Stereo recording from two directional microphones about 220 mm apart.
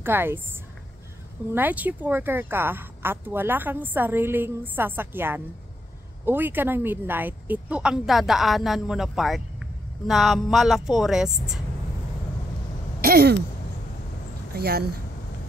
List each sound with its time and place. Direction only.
0.0 s a woman's voice: 10° right (ahead or behind)
1.5 s a woman's voice: 10° right (ahead or behind)
13.0 s a sound: 45° right (ahead or behind)
14.5 s speech: 45° right (ahead or behind)